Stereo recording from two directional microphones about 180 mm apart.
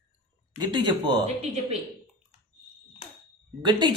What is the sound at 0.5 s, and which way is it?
Speech, 25° right (ahead or behind).